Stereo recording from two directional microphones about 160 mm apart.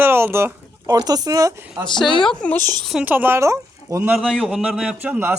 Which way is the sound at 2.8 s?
5° right (ahead or behind).